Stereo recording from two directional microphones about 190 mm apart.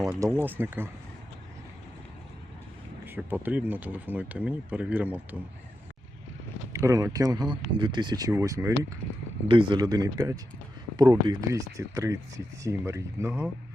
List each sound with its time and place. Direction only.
0.1 s speech: 15° right (ahead or behind)
3.1 s speech: 10° right (ahead or behind)
6.7 s speech: 15° right (ahead or behind)
9.5 s speech: 25° right (ahead or behind)